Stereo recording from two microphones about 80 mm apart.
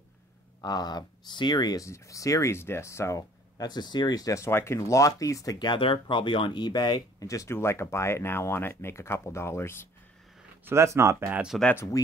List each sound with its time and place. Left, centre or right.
0.6 s speech: left
1.8 s speech: left
2.5 s speech: left
4.5 s speech: left
4.7 s speech: left
5.6 s speech: left
7.2 s speech: left
7.5 s speech: left
10.6 s speech: right
11.7 s speech: left